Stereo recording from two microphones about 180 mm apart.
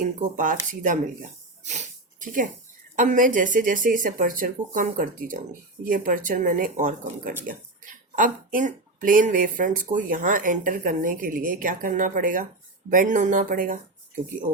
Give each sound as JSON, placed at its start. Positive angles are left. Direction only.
{"t": 0.2, "sound": "speech", "side_deg": -45}
{"t": 1.6, "sound": "a sound", "side_deg": -40}
{"t": 2.9, "sound": "speech", "side_deg": -45}